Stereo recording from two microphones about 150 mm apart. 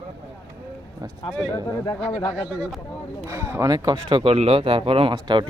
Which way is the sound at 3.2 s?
20° right (ahead or behind).